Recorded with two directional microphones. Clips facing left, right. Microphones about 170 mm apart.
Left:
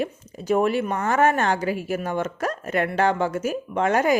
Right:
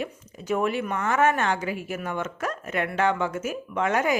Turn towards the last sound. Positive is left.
turn(degrees=35)  # may be behind; listen again after turning